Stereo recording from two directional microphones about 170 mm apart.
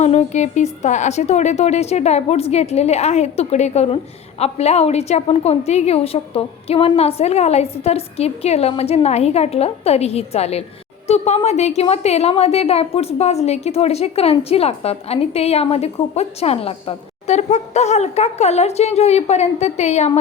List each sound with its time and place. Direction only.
0.0 s a woman's voice: 40° left (ahead or behind)